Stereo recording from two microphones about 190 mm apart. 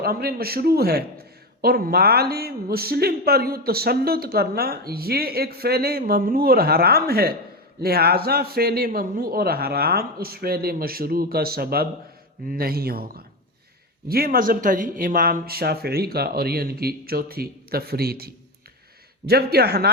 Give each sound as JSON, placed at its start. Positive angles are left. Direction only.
{"t": 0.0, "sound": "a man's voice", "side_deg": -55}